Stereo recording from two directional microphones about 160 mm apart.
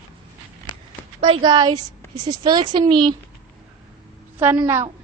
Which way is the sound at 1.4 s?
25° right (ahead or behind).